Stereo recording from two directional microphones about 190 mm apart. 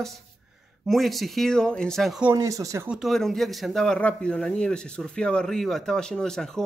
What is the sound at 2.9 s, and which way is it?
Speech, centre (ahead or behind).